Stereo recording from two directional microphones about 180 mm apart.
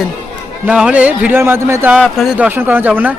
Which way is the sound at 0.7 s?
5° right (ahead or behind).